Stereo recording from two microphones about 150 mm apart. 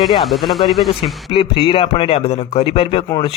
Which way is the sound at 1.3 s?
35° left (ahead or behind).